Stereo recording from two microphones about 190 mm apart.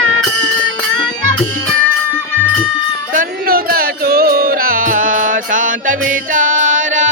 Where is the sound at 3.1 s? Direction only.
50° right (ahead or behind).